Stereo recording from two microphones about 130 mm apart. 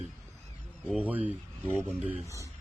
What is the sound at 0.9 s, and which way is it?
Speech, 10° right (ahead or behind).